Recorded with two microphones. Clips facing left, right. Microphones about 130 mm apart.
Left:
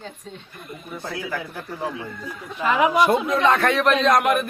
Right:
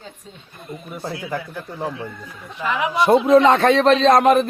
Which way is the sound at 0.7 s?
25° right (ahead or behind).